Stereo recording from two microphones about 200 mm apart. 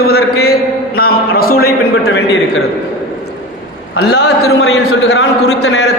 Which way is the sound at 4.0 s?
55° left (ahead or behind).